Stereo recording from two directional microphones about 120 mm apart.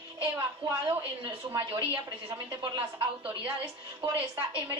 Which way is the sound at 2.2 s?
35° right (ahead or behind).